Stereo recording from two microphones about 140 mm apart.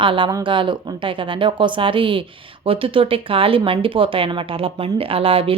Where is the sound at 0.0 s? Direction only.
35° right (ahead or behind).